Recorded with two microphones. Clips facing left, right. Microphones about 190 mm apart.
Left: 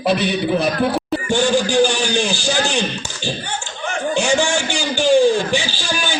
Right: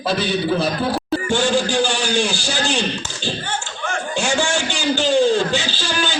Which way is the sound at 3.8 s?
15° left (ahead or behind).